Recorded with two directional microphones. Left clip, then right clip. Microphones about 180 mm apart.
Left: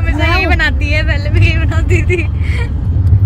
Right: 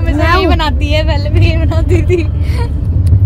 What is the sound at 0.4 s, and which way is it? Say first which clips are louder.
Vehicle: right 1 dB; 10° right (ahead or behind).